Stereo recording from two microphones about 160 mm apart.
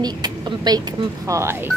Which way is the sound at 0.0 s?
25° right (ahead or behind).